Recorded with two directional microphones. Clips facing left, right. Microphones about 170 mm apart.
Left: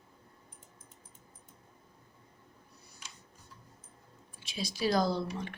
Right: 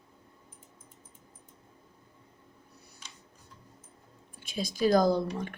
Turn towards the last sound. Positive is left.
turn(degrees=-45)  # may be behind; listen again after turning